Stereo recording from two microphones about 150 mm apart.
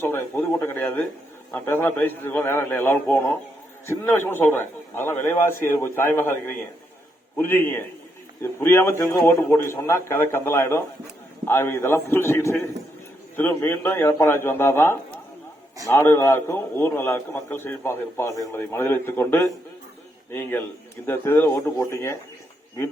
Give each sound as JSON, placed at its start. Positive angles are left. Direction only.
{"t": 0.0, "sound": "a man's voice", "side_deg": 15}
{"t": 7.3, "sound": "a man's voice", "side_deg": 15}
{"t": 21.1, "sound": "a man's voice", "side_deg": 15}